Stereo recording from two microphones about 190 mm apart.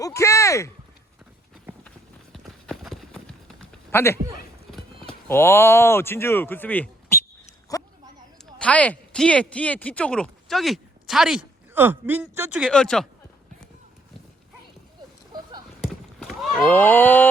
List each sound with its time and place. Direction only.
0.0 s a sound: 15° left (ahead or behind)
2.3 s clip-clop: centre (ahead or behind)
5.3 s speech: 10° left (ahead or behind)
7.8 s a sound: 15° left (ahead or behind)
8.5 s speech: 5° left (ahead or behind)
16.6 s speech: 10° left (ahead or behind)